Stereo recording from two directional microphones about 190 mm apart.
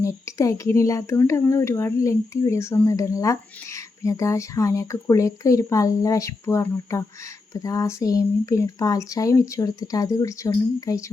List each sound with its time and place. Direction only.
0.0 s speech: 15° left (ahead or behind)